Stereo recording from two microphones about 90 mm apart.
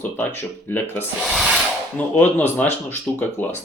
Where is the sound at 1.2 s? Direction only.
5° right (ahead or behind).